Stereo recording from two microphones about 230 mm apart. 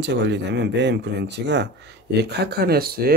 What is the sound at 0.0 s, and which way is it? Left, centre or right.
Speech, right.